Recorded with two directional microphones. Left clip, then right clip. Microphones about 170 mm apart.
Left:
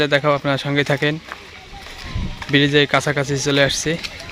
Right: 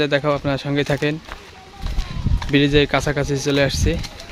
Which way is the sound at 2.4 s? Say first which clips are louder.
Left 1 dB; 5° right (ahead or behind).